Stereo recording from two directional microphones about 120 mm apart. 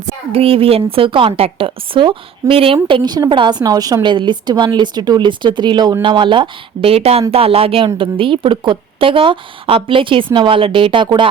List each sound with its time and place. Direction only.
0.3 s a woman's voice: 50° right (ahead or behind)